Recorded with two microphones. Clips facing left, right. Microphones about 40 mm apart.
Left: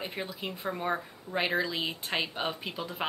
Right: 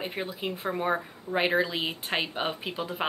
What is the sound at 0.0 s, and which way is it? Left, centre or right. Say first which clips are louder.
A woman's voice: right 4 dB; centre.